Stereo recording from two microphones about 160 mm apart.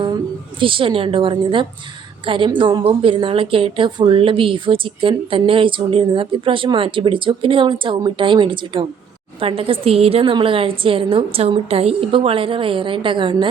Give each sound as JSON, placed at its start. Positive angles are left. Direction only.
{"t": 0.6, "sound": "a woman's voice", "side_deg": -35}